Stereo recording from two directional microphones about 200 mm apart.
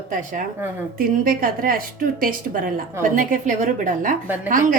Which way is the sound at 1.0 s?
45° right (ahead or behind).